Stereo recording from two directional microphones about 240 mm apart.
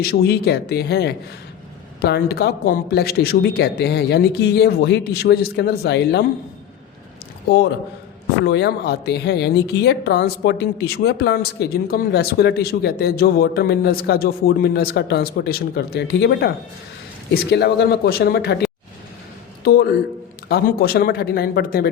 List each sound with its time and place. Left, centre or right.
0.0 s a woman's voice: left
8.4 s a woman's voice: left
19.6 s speech: left